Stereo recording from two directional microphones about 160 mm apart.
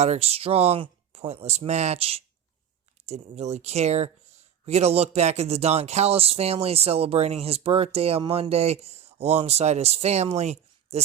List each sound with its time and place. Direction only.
0.0 s speech: 40° right (ahead or behind)